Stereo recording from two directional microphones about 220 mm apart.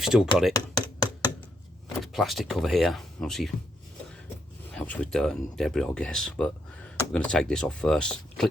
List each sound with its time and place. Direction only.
0.0 s speech: centre (ahead or behind)
0.5 s computer keyboard: 20° left (ahead or behind)
2.0 s speech: centre (ahead or behind)
4.7 s speech: 5° left (ahead or behind)